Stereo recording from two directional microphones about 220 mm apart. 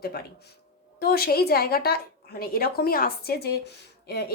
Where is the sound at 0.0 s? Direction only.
45° left (ahead or behind).